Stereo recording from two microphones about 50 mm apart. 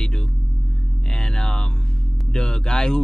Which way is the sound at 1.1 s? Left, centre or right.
Centre.